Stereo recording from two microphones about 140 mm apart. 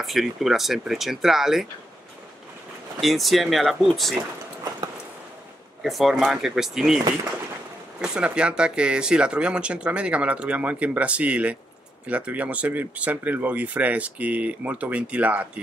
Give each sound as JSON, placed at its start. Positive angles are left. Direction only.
{"t": 0.0, "sound": "speech", "side_deg": 0}
{"t": 3.0, "sound": "speech", "side_deg": 0}
{"t": 5.8, "sound": "speech", "side_deg": 0}
{"t": 8.0, "sound": "speech", "side_deg": -5}